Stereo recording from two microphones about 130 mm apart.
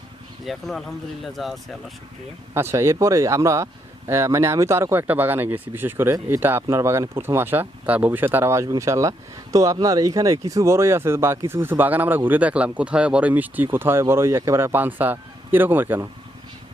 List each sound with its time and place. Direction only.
0.4 s speech: centre (ahead or behind)
2.5 s speech: 20° right (ahead or behind)